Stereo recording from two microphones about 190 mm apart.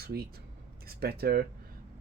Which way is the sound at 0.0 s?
55° right (ahead or behind).